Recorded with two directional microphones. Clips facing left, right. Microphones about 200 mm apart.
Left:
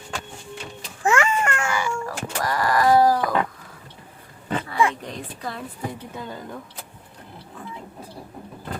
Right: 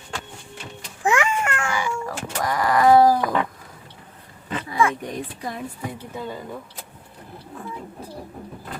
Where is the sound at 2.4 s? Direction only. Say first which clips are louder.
Right 2 dB; 20° right (ahead or behind).